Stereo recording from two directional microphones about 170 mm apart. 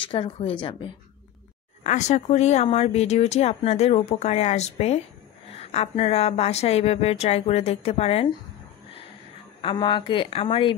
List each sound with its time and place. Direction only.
0.0 s speech: 30° left (ahead or behind)
1.8 s speech: 40° left (ahead or behind)
9.6 s speech: 30° left (ahead or behind)